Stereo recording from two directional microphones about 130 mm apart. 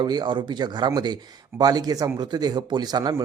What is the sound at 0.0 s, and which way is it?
A man's voice, 35° right (ahead or behind).